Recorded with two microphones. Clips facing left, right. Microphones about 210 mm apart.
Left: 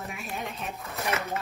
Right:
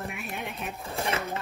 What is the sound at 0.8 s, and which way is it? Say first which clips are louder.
Speech: right 1 dB; 30° right (ahead or behind).